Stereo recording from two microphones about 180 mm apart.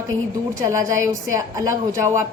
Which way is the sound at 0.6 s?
15° right (ahead or behind).